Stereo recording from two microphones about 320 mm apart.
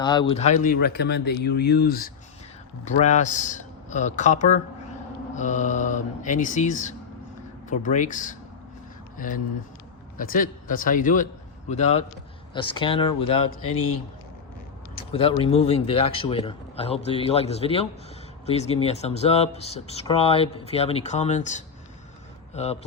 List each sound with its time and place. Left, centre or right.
0.0 s speech: centre
13.6 s speech: left
15.1 s speech: centre